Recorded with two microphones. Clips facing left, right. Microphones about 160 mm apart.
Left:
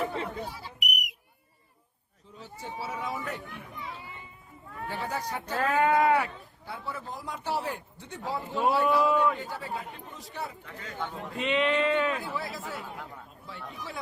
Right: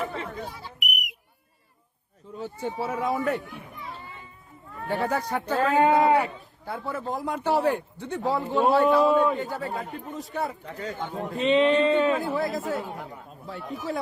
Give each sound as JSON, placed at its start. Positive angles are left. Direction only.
{"t": 0.1, "sound": "smoke detector", "side_deg": 20}
{"t": 0.8, "sound": "whistle", "side_deg": -50}
{"t": 2.3, "sound": "speech", "side_deg": -55}
{"t": 3.4, "sound": "children playing", "side_deg": 0}
{"t": 4.9, "sound": "speech", "side_deg": -60}
{"t": 5.5, "sound": "speech", "side_deg": -30}
{"t": 6.7, "sound": "speech", "side_deg": -50}
{"t": 9.4, "sound": "speech", "side_deg": -50}
{"t": 10.7, "sound": "speech", "side_deg": -35}
{"t": 12.1, "sound": "speech", "side_deg": -50}